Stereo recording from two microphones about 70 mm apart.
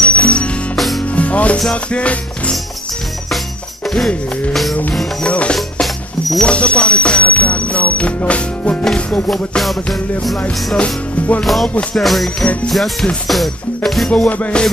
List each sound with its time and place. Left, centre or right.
0.1 s music: centre
0.7 s music: centre
1.1 s music: centre
3.8 s music: centre
5.2 s speech: centre
5.6 s music: centre
6.4 s speech: centre
9.6 s music: centre
10.8 s speech: centre
11.4 s music: centre
14.1 s music: left